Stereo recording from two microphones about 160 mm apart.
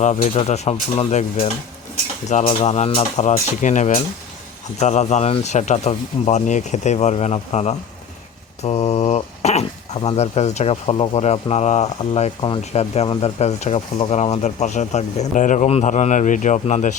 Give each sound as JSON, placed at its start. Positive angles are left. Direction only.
{"t": 0.0, "sound": "speech", "side_deg": 45}